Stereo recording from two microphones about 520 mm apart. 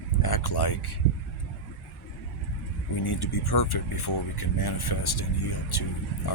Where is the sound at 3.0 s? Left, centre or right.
Left.